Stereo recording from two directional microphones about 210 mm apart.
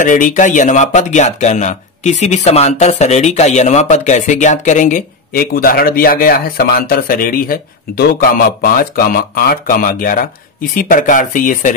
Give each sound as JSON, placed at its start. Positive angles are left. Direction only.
{"t": 0.0, "sound": "speech", "side_deg": 40}